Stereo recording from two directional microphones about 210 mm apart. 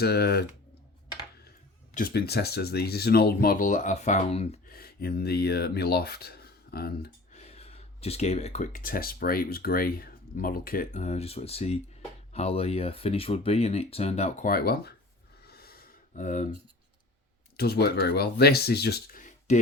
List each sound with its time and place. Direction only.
0.0 s speech: 50° left (ahead or behind); by 4.6 s 30° left (ahead or behind)
4.7 s speech: 45° left (ahead or behind)
7.3 s speech: 30° left (ahead or behind); by 14.9 s 50° left (ahead or behind)
15.4 s a sound: 45° left (ahead or behind)
17.6 s speech: 50° left (ahead or behind)